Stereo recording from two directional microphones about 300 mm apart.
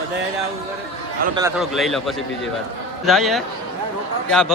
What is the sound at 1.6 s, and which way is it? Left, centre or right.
A man's voice, centre.